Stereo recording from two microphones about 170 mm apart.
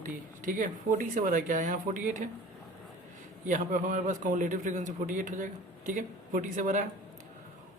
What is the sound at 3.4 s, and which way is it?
A man's voice, 50° right (ahead or behind).